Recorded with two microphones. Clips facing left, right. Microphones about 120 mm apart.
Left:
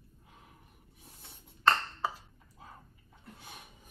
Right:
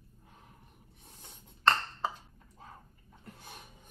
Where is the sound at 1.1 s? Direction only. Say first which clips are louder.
Right 1 dB; centre (ahead or behind).